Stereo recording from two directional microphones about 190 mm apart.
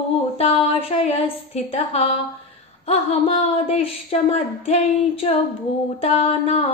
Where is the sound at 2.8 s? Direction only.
30° left (ahead or behind).